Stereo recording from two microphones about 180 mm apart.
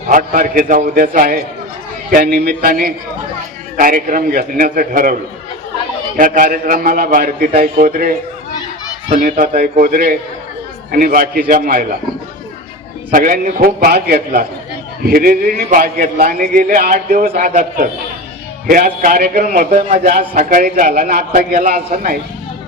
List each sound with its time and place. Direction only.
0.1 s a man's voice: 50° right (ahead or behind)
6.1 s a man's voice: 50° right (ahead or behind)
13.1 s a man's voice: 50° right (ahead or behind)